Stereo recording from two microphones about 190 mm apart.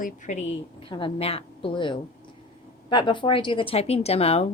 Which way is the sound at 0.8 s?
25° left (ahead or behind).